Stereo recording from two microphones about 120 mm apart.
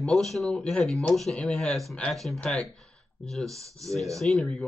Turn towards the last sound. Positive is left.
turn(degrees=5)  # may be behind; listen again after turning